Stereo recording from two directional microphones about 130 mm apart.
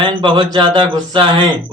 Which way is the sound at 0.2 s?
40° right (ahead or behind).